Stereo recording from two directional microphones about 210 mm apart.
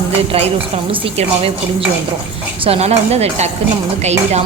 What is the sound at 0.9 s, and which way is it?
Speech, 25° right (ahead or behind).